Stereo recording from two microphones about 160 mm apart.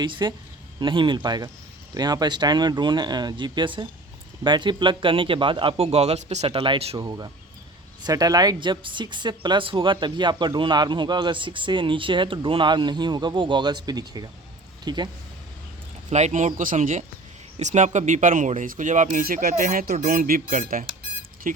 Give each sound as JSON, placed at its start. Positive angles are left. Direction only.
{"t": 0.0, "sound": "speech", "side_deg": -30}
{"t": 6.9, "sound": "speech", "side_deg": -25}
{"t": 16.0, "sound": "speech", "side_deg": -45}
{"t": 21.5, "sound": "music", "side_deg": -55}